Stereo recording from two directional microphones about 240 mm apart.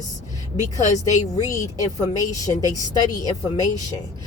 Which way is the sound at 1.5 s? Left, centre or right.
Centre.